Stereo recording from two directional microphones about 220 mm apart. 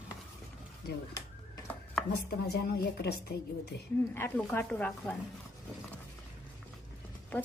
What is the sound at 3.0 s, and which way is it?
Speech, 50° left (ahead or behind).